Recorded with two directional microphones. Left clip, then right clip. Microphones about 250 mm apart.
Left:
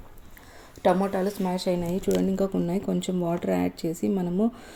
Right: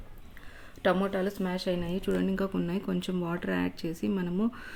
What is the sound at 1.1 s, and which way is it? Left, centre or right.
Speech, centre.